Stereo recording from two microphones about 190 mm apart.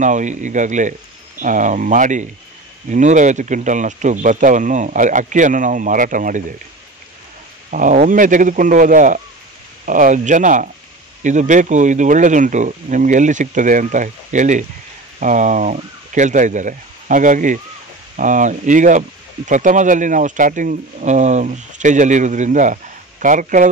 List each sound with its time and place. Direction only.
0.0 s speech: 40° right (ahead or behind)
7.7 s speech: 45° right (ahead or behind)